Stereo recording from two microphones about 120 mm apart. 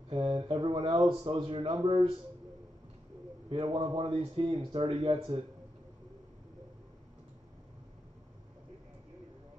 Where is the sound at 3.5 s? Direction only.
50° right (ahead or behind).